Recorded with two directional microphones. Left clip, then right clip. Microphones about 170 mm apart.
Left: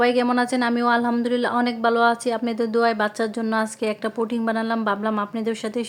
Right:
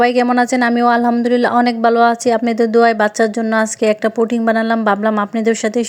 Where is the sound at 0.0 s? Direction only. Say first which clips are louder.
Right 7 dB; 35° right (ahead or behind).